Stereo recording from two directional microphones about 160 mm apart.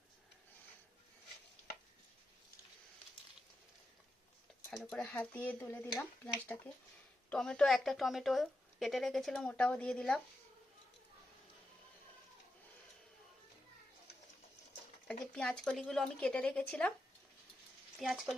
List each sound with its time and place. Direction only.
4.8 s a woman's voice: centre (ahead or behind)
5.0 s speech: 10° left (ahead or behind)
7.3 s a woman's voice: 5° left (ahead or behind)
15.0 s a woman's voice: 5° left (ahead or behind)
18.0 s a woman's voice: centre (ahead or behind)